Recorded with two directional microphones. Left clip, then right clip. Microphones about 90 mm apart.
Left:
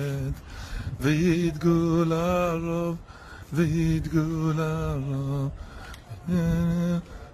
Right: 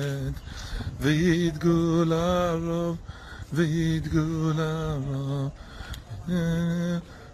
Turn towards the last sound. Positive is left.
turn(degrees=30)  # may be behind; listen again after turning